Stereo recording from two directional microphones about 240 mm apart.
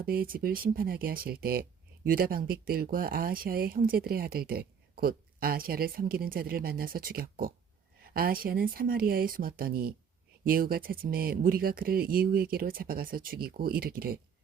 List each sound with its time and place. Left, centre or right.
0.0 s speech: right